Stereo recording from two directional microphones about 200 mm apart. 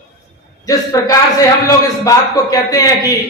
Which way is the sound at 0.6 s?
15° left (ahead or behind).